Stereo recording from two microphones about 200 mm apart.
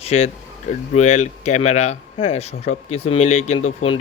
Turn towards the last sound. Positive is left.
turn(degrees=25)  # may be behind; listen again after turning